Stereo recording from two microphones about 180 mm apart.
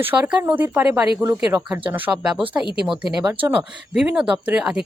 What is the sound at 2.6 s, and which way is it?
Speech, 25° left (ahead or behind).